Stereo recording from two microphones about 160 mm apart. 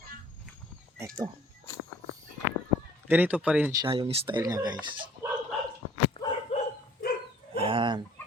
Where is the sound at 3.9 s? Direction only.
35° right (ahead or behind).